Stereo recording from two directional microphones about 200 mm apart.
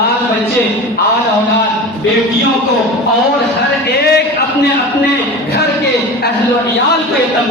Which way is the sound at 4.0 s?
55° left (ahead or behind).